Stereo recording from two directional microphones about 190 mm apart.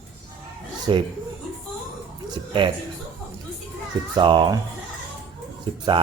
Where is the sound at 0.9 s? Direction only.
25° right (ahead or behind).